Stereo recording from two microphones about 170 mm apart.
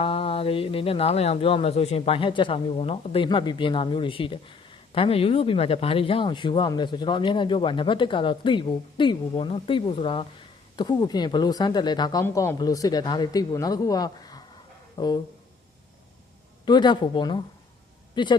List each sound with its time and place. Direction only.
0.0 s speech: 35° left (ahead or behind)
16.6 s speech: 25° left (ahead or behind)